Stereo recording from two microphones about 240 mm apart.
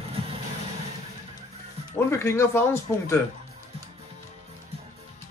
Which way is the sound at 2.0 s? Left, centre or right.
Centre.